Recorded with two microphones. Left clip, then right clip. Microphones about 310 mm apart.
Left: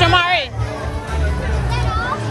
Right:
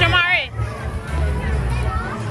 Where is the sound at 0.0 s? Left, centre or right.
Centre.